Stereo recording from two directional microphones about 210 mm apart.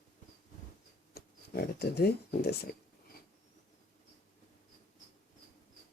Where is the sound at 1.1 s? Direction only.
50° left (ahead or behind).